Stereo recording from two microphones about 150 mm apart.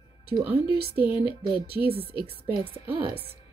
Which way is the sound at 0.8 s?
90° right.